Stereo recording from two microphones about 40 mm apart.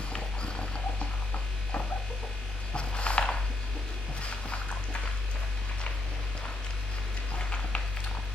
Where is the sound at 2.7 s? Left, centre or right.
Left.